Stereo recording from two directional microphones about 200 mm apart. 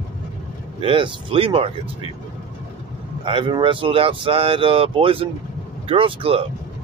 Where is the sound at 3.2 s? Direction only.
25° right (ahead or behind).